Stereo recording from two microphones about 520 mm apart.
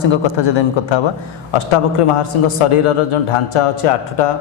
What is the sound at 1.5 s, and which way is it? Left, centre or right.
A man's voice, left.